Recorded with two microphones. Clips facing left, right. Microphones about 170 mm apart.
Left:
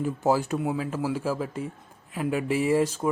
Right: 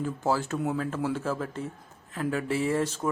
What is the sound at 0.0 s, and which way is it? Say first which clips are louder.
Speech: left 4 dB; 15° left (ahead or behind).